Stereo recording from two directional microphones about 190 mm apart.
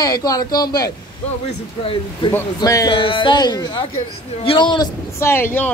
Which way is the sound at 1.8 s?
25° left (ahead or behind).